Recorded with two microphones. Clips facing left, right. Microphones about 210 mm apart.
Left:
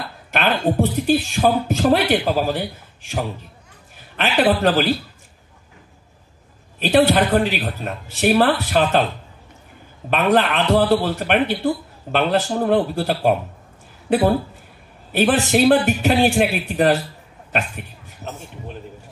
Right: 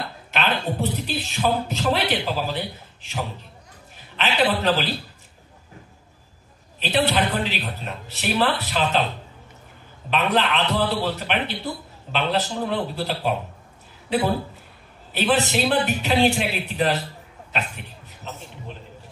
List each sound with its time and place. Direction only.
0.3 s a man's voice: 50° left (ahead or behind)
6.8 s a man's voice: 50° left (ahead or behind)
10.0 s a man's voice: 50° left (ahead or behind)